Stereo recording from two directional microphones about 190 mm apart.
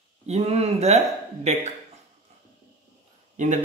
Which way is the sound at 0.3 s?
35° right (ahead or behind).